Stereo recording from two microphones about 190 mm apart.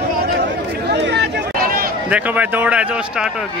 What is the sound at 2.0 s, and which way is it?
Speech, 5° right (ahead or behind).